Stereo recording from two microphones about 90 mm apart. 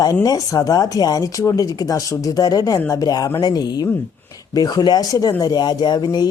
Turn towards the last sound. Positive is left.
turn(degrees=50)  # may be behind; listen again after turning